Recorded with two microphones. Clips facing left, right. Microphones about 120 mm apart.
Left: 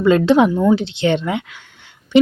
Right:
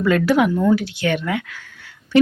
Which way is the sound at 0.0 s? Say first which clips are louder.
Left 4 dB; 25° left (ahead or behind).